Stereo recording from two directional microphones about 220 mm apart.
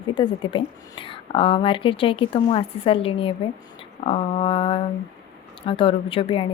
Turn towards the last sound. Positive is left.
turn(degrees=25)  # may be behind; listen again after turning